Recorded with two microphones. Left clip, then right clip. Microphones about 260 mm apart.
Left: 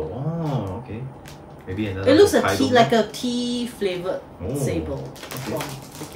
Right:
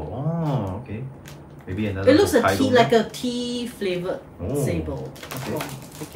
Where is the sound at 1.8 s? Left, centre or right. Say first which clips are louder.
Left 2 dB; centre.